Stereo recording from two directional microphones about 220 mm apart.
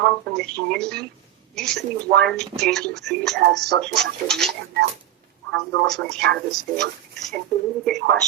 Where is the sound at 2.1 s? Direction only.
50° right (ahead or behind).